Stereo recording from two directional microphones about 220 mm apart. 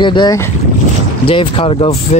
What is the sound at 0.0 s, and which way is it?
Speech, 20° left (ahead or behind).